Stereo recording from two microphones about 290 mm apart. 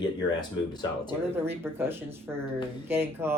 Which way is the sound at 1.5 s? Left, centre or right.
Centre.